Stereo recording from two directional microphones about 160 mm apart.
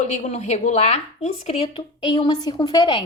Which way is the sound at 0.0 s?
45° left (ahead or behind).